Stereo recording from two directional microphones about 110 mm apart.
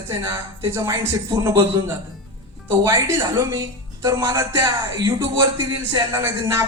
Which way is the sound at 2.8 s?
30° right (ahead or behind).